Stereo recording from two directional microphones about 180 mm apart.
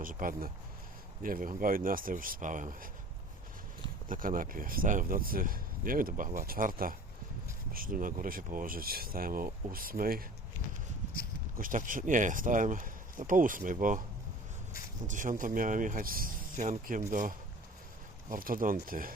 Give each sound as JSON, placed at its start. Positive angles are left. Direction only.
{"t": 0.0, "sound": "speech", "side_deg": -50}
{"t": 4.1, "sound": "speech", "side_deg": -50}
{"t": 11.5, "sound": "speech", "side_deg": -50}
{"t": 15.0, "sound": "speech", "side_deg": -45}